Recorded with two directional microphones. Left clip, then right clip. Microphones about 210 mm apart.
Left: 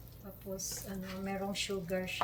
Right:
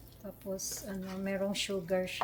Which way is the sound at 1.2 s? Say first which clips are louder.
Right 4 dB; 45° right (ahead or behind).